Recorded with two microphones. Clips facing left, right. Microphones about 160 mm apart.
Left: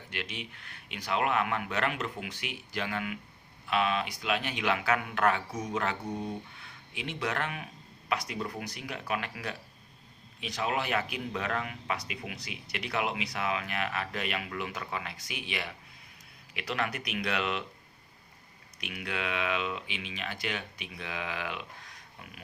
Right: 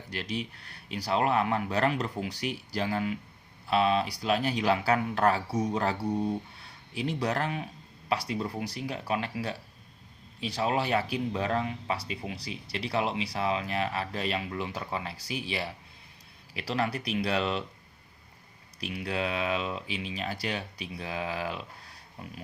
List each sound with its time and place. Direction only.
0.1 s speech: 40° right (ahead or behind)
18.8 s speech: 30° right (ahead or behind)